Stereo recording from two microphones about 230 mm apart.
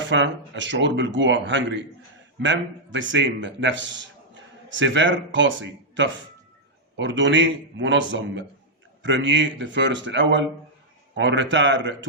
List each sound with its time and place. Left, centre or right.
0.0 s a man's voice: right